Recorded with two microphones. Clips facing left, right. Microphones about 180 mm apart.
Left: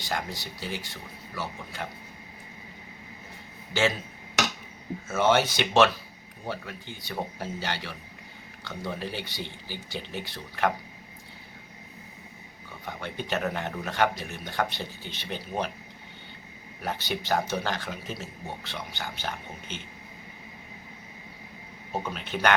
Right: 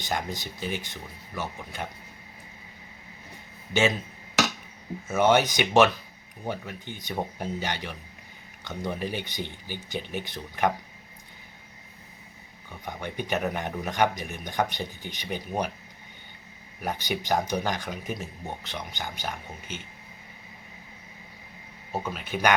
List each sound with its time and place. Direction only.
0.0 s speech: 20° right (ahead or behind)
5.0 s speech: 15° right (ahead or behind)
12.8 s speech: 15° right (ahead or behind)
16.8 s speech: 15° right (ahead or behind)
21.9 s speech: 5° right (ahead or behind)